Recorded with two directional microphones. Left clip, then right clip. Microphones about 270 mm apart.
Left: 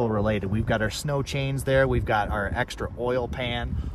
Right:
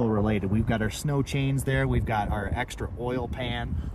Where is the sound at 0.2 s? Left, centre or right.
Left.